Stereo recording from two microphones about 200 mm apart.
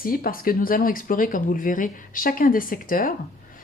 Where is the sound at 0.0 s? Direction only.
45° left (ahead or behind).